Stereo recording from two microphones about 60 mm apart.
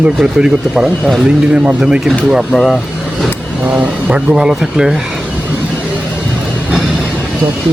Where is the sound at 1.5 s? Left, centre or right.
Centre.